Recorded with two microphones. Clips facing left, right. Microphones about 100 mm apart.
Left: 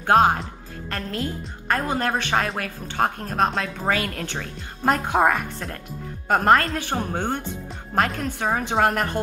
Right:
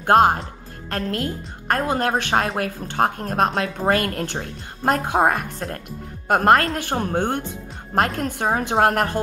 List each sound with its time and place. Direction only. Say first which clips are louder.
0.0 s a woman's voice: right 2 dB; 50° right (ahead or behind)
6.2 s a woman's voice: right 2 dB; 55° right (ahead or behind)